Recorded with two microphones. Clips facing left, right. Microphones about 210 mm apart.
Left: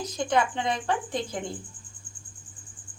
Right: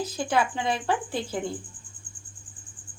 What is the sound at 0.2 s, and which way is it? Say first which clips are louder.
A woman's voice: left 1 dB; 5° right (ahead or behind).